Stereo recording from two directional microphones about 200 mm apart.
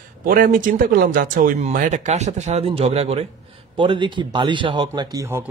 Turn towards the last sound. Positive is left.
turn(degrees=-10)  # may be behind; listen again after turning